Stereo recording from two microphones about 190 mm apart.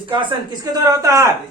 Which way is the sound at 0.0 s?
25° right (ahead or behind).